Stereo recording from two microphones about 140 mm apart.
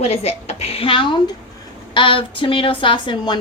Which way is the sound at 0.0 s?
45° left (ahead or behind).